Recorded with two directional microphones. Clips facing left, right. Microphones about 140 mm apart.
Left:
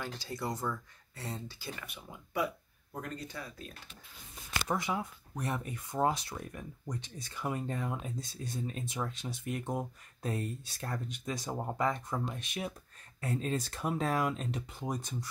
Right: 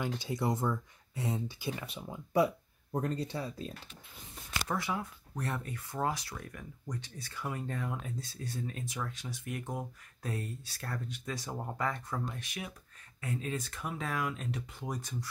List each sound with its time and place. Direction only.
0.0 s speech: 20° right (ahead or behind)
1.9 s speech: 30° right (ahead or behind)
4.6 s speech: 20° left (ahead or behind)
13.2 s speech: 35° left (ahead or behind)